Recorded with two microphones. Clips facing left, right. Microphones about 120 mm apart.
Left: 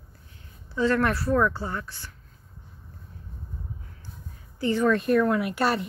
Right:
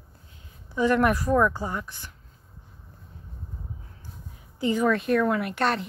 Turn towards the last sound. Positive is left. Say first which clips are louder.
# left 1 dB
turn(degrees=5)  # may be behind; listen again after turning